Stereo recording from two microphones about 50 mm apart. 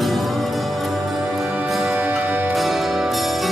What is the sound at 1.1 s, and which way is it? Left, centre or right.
Music, centre.